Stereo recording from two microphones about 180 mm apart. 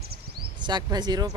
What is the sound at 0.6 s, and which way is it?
Speech, 25° right (ahead or behind).